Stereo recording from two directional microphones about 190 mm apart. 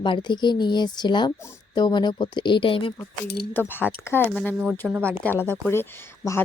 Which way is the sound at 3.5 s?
10° left (ahead or behind).